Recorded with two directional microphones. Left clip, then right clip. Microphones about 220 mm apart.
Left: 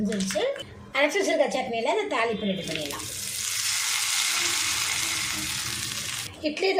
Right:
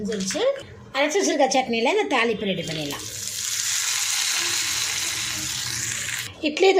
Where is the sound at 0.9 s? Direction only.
15° right (ahead or behind).